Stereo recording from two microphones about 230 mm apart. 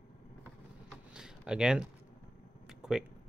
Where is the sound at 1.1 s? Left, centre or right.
Centre.